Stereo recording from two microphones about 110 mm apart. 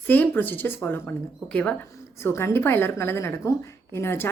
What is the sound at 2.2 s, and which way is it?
A woman's voice, 25° left (ahead or behind).